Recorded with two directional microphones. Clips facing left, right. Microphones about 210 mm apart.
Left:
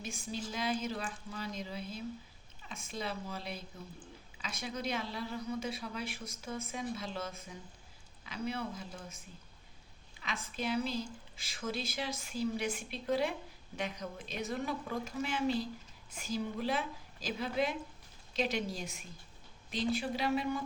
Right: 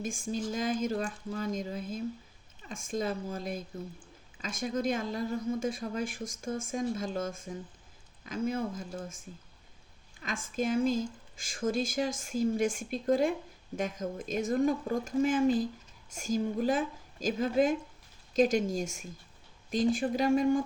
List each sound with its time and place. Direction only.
0.0 s speech: 50° right (ahead or behind)